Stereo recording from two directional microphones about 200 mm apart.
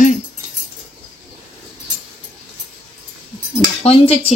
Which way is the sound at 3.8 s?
30° left (ahead or behind).